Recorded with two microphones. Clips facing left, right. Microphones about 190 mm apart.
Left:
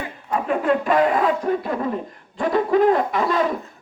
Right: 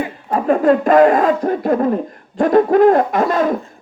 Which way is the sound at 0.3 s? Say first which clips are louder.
Right 7 dB; 40° right (ahead or behind).